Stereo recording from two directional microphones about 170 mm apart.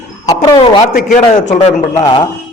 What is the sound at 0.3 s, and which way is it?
Speech, 25° left (ahead or behind).